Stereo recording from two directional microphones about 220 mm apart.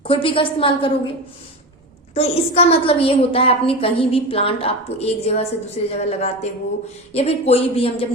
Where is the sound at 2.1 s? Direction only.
30° left (ahead or behind).